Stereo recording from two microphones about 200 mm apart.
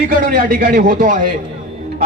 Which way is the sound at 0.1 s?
45° right (ahead or behind).